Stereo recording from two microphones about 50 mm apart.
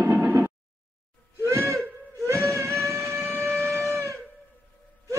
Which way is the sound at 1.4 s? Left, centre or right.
Right.